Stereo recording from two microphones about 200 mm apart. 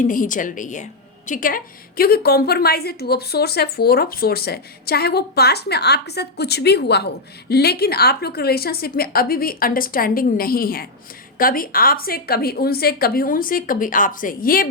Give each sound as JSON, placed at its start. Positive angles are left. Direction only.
{"t": 0.0, "sound": "a woman's voice", "side_deg": 40}